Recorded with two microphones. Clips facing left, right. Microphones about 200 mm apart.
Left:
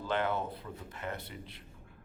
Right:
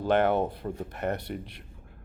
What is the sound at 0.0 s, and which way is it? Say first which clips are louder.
Speech: right 9 dB; 70° right (ahead or behind).